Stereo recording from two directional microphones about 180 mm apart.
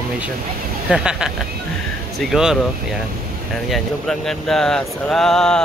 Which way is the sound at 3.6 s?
Centre (ahead or behind).